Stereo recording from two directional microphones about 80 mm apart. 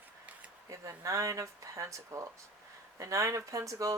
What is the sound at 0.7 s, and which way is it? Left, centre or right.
Speech, right.